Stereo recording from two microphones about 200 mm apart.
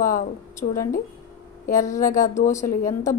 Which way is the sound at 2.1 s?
15° left (ahead or behind).